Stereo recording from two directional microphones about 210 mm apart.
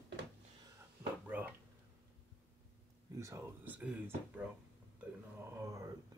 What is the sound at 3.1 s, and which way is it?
Speech, 15° right (ahead or behind).